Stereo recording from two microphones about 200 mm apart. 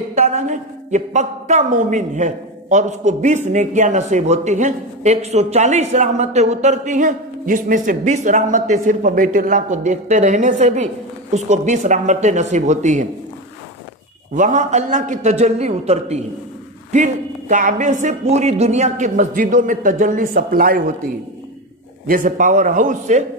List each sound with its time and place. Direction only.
0.1 s a woman's voice: 35° right (ahead or behind)
14.3 s a woman's voice: 40° right (ahead or behind)